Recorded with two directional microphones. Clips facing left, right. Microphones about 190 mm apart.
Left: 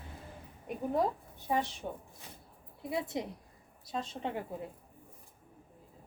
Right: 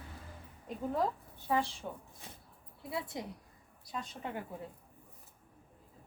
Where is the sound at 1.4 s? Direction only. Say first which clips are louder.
Even; 20° left (ahead or behind).